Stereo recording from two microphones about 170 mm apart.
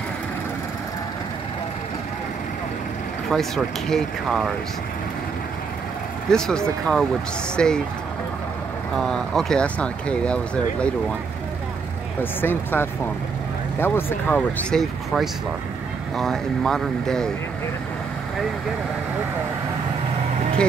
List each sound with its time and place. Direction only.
3.3 s speech: centre (ahead or behind)
6.3 s speech: 5° left (ahead or behind)
8.9 s speech: centre (ahead or behind)
12.2 s speech: 10° left (ahead or behind)
14.7 s speech: centre (ahead or behind)